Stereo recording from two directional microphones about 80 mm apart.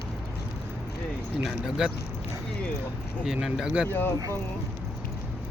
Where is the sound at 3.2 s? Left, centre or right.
Centre.